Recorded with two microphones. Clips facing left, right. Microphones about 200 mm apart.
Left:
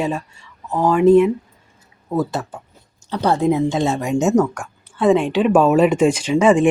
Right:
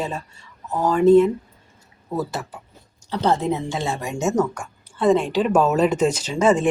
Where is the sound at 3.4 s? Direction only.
15° left (ahead or behind).